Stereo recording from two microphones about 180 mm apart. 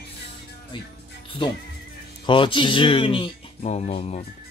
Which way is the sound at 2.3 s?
30° left (ahead or behind).